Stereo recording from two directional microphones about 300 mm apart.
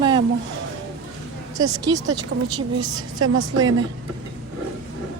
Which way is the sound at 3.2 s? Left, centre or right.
Right.